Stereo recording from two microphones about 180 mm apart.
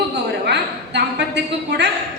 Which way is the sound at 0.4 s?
70° right (ahead or behind).